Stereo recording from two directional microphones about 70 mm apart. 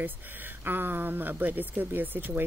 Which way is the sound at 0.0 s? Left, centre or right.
Right.